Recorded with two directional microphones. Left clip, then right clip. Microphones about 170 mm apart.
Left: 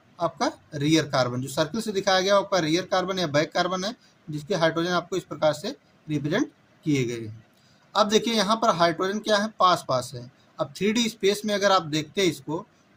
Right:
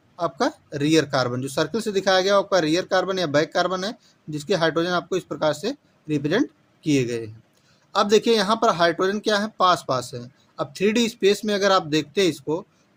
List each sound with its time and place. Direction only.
0.2 s speech: 55° right (ahead or behind)